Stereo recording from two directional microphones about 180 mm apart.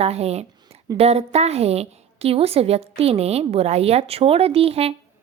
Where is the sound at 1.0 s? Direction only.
35° right (ahead or behind).